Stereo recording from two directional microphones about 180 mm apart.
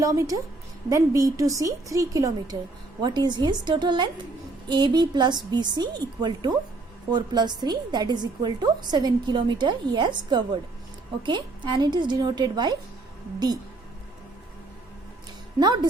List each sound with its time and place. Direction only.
0.0 s a woman's voice: 20° right (ahead or behind)
15.5 s a woman's voice: 25° right (ahead or behind)